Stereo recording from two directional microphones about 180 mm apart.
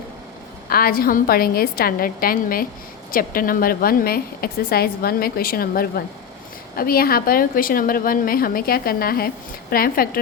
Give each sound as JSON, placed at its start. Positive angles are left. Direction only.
{"t": 0.7, "sound": "a woman's voice", "side_deg": 55}